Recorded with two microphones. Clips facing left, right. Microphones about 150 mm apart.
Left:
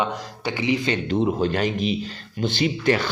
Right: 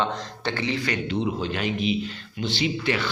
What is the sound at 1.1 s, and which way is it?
A man's voice, 45° left (ahead or behind).